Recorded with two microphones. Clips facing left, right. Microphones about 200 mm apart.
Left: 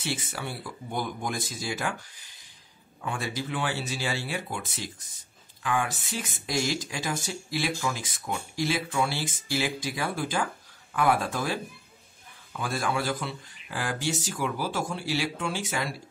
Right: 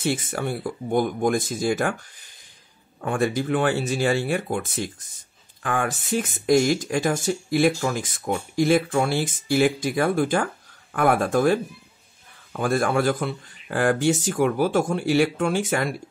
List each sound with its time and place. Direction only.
0.0 s speech: 50° right (ahead or behind)